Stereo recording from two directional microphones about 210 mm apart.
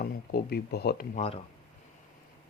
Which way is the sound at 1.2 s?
30° left (ahead or behind).